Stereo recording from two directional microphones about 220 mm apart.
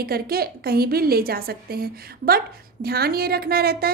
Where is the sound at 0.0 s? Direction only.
45° right (ahead or behind).